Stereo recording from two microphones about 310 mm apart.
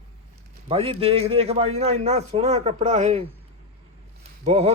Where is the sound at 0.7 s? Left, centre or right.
Centre.